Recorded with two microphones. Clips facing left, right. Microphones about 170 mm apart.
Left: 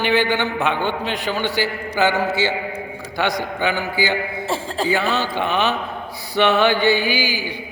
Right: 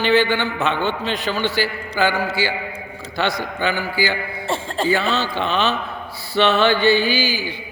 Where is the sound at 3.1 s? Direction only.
15° left (ahead or behind).